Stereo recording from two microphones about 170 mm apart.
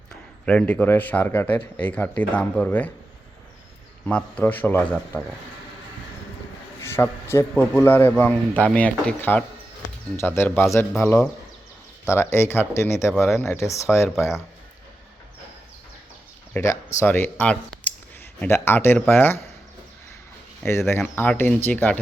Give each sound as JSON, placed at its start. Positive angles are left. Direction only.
{"t": 0.4, "sound": "a man's voice", "side_deg": 5}
{"t": 4.0, "sound": "a man's voice", "side_deg": 10}
{"t": 6.8, "sound": "a man's voice", "side_deg": 15}
{"t": 13.2, "sound": "speech", "side_deg": 0}
{"t": 13.5, "sound": "a man's voice", "side_deg": 15}
{"t": 16.6, "sound": "a man's voice", "side_deg": 15}
{"t": 20.7, "sound": "a man's voice", "side_deg": 15}